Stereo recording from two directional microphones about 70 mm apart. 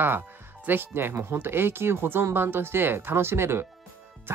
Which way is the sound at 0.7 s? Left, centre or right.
Right.